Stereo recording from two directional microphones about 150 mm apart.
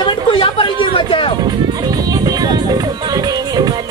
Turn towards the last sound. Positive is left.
turn(degrees=-25)  # may be behind; listen again after turning